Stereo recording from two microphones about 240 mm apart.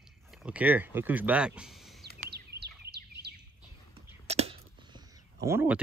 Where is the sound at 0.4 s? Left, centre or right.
Centre.